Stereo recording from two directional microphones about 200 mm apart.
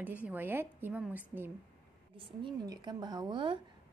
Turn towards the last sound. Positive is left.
turn(degrees=-25)  # may be behind; listen again after turning